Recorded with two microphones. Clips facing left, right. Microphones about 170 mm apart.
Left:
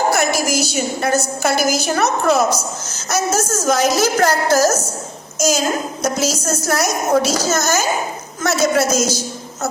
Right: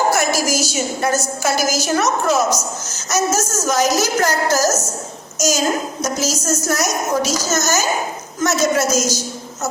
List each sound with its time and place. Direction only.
0.1 s a woman's voice: 60° left (ahead or behind)